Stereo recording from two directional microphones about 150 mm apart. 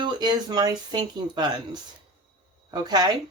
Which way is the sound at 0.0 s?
30° right (ahead or behind).